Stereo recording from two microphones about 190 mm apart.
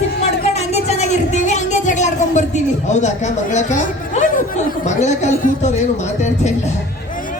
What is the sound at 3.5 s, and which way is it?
Speech, 40° left (ahead or behind).